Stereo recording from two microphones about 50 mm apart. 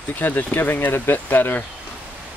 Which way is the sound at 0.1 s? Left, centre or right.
Left.